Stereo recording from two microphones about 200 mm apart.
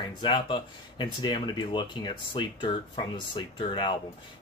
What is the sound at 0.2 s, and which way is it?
Speech, 25° left (ahead or behind).